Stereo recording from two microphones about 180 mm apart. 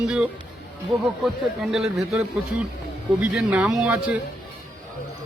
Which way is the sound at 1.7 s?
Centre (ahead or behind).